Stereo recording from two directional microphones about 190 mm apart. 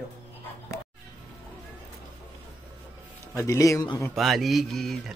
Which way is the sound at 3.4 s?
15° left (ahead or behind).